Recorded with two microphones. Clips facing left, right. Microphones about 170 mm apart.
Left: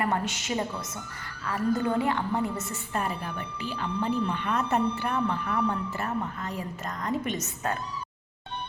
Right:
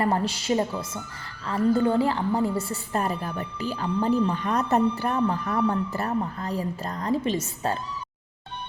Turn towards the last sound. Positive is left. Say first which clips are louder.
# right 4 dB
turn(degrees=-30)  # may be behind; listen again after turning